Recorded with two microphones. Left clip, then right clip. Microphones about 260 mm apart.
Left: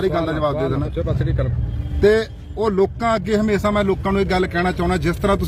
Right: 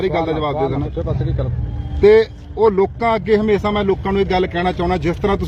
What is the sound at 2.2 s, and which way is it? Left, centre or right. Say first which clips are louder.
Speech: right 7 dB; left.